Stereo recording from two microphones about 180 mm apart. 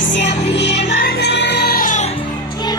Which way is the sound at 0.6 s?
75° left (ahead or behind).